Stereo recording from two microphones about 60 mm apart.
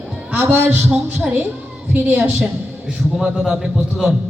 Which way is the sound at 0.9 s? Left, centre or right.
Centre.